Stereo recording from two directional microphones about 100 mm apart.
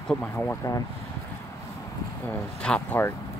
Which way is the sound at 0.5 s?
35° left (ahead or behind).